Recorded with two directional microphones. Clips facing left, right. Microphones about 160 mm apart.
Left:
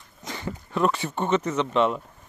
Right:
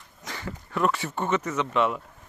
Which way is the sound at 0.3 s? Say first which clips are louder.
Left 3 dB; 20° left (ahead or behind).